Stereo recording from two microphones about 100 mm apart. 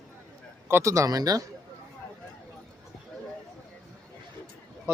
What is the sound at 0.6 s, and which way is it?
Speech, 30° right (ahead or behind).